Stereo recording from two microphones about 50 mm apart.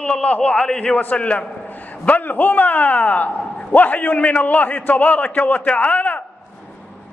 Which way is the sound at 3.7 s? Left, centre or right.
Left.